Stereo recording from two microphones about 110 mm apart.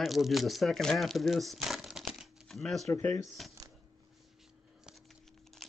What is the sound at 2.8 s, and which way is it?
Speech, 30° left (ahead or behind).